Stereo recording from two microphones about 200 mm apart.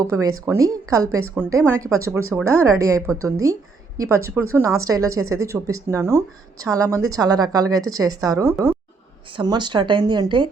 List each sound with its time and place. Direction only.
0.0 s speech: 15° right (ahead or behind)